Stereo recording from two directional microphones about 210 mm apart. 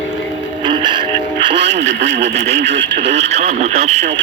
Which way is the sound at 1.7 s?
55° right (ahead or behind).